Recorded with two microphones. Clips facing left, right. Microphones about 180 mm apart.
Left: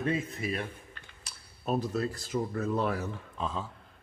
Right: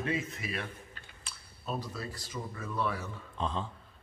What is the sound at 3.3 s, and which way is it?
Speech, 5° left (ahead or behind).